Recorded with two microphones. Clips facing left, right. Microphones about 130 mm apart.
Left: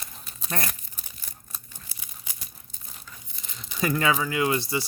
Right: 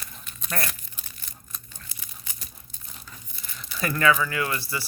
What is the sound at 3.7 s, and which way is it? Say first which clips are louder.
Speech: right 1 dB; 20° left (ahead or behind).